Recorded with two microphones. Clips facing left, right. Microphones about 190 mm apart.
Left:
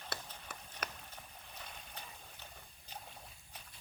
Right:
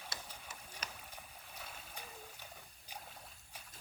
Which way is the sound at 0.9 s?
10° right (ahead or behind).